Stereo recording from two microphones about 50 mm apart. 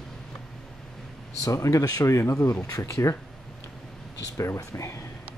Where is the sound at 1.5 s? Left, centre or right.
Left.